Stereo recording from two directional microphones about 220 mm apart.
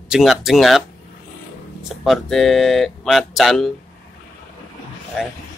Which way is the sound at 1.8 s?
Centre (ahead or behind).